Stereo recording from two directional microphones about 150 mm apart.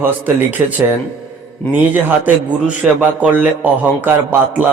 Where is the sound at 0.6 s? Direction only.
15° right (ahead or behind).